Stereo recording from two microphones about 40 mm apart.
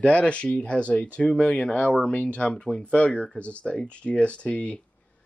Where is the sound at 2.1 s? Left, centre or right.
Left.